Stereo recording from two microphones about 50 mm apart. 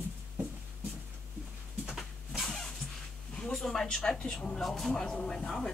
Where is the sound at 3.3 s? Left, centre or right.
Centre.